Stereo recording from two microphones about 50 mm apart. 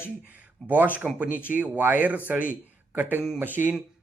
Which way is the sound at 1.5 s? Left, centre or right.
Right.